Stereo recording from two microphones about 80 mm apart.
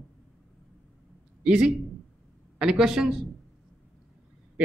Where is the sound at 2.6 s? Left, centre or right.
Centre.